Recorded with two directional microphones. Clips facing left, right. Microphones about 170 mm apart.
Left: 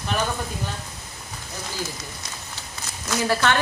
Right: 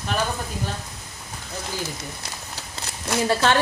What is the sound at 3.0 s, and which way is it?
Speech, 25° right (ahead or behind).